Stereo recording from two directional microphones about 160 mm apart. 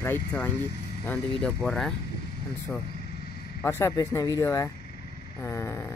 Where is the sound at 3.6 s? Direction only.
15° left (ahead or behind).